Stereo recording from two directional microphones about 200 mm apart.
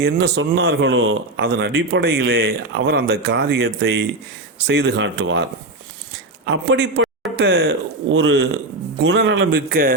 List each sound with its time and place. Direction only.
0.0 s speech: 65° right (ahead or behind)
1.4 s speech: 55° right (ahead or behind)
7.3 s speech: 75° right (ahead or behind); by 9.9 s 45° right (ahead or behind)